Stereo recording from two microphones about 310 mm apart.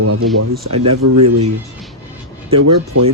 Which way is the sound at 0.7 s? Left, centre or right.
Right.